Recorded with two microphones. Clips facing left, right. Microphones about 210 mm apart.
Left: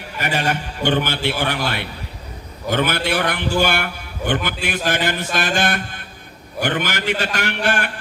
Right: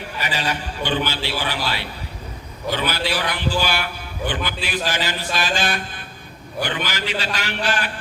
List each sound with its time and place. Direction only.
0.2 s a man's voice: 50° left (ahead or behind)